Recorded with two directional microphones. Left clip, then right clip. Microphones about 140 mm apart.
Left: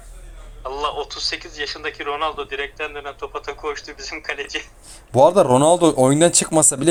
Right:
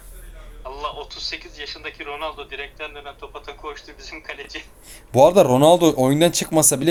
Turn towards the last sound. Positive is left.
turn(degrees=10)  # may be behind; listen again after turning